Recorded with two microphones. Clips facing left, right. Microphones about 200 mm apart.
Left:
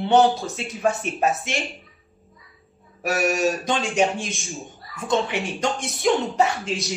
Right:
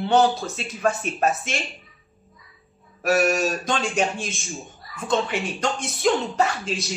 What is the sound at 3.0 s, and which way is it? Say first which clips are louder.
Speech: right 1 dB; 15° left (ahead or behind).